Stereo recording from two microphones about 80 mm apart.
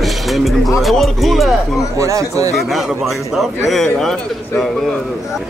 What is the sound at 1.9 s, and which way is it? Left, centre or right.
Speech, right.